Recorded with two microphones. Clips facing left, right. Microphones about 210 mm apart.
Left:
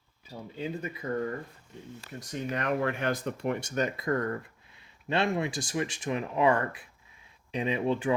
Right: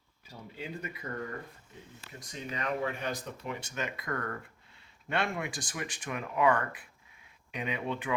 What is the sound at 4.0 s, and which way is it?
Speech, 25° left (ahead or behind).